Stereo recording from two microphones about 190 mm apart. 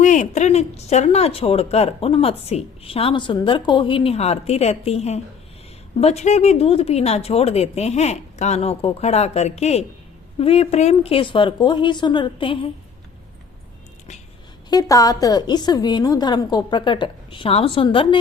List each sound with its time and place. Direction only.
0.0 s a woman's voice: 40° left (ahead or behind)
14.7 s a woman's voice: 20° left (ahead or behind)